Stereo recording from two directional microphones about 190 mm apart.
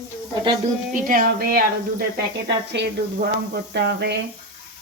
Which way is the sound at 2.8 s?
65° right (ahead or behind).